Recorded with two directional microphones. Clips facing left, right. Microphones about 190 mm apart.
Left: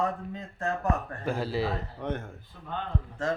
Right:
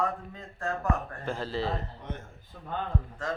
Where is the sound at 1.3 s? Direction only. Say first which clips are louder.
Left 2 dB; 10° left (ahead or behind).